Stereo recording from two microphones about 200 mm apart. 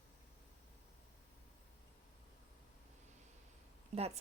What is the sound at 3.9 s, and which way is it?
Speech, 30° right (ahead or behind).